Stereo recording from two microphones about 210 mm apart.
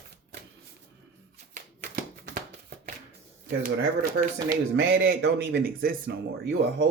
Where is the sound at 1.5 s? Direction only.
40° right (ahead or behind).